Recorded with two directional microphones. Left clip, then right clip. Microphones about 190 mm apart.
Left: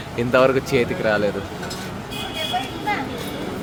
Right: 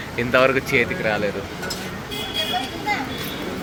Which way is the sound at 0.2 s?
25° left (ahead or behind).